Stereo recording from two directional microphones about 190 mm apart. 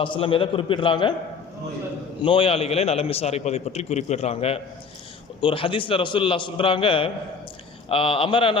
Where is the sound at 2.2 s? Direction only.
30° left (ahead or behind).